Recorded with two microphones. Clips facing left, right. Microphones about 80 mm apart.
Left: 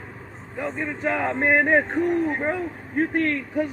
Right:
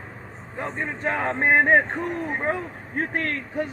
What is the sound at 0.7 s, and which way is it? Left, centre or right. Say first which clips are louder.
A man's voice: left 1 dB; right.